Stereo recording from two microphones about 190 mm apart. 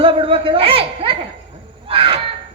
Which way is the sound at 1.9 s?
30° right (ahead or behind).